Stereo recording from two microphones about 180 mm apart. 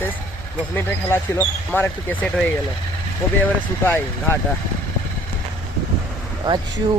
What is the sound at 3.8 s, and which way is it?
Speech, 10° left (ahead or behind).